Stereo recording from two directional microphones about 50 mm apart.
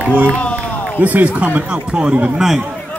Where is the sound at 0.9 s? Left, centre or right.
Right.